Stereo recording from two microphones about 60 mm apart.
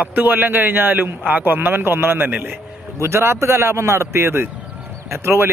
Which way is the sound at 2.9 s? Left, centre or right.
Right.